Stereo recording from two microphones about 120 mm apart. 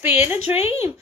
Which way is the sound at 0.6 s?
60° left (ahead or behind).